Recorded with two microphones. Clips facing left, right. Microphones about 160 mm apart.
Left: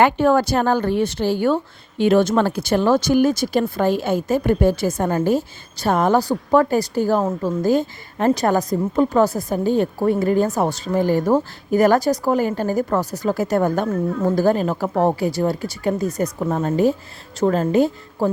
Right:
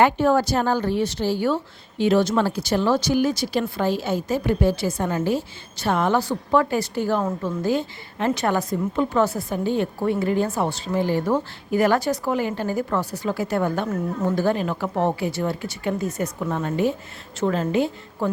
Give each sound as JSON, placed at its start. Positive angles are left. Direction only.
{"t": 0.0, "sound": "a woman's voice", "side_deg": 60}